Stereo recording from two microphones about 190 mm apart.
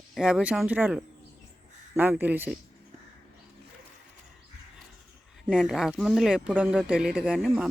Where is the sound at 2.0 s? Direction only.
10° right (ahead or behind).